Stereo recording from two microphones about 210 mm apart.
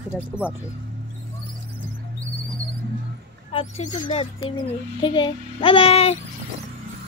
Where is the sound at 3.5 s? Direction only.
30° left (ahead or behind).